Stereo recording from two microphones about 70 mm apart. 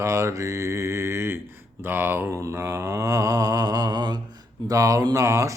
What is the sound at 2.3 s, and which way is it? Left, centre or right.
Mantra, right.